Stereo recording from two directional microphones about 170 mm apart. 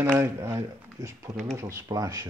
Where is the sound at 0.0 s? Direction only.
15° right (ahead or behind).